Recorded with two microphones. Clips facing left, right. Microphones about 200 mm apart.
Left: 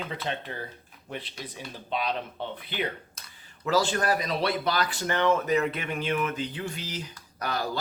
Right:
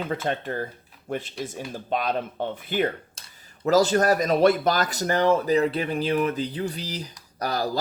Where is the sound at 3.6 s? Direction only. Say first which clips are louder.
Right 6 dB; 40° right (ahead or behind).